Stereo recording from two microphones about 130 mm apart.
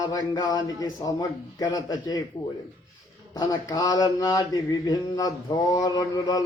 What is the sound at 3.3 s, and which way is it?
A man's voice, 30° left (ahead or behind).